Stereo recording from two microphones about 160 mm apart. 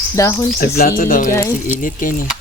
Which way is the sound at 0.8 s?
65° left (ahead or behind).